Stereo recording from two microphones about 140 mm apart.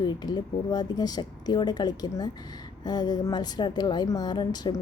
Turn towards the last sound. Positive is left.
turn(degrees=30)  # may be behind; listen again after turning